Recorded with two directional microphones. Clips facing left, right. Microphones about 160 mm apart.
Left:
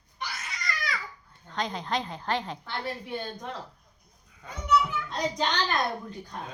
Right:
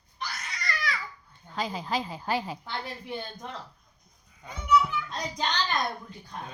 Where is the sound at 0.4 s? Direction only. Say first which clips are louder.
Right 3 dB; centre (ahead or behind).